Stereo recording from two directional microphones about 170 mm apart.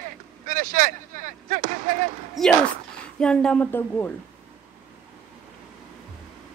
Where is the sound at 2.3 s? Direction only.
5° left (ahead or behind).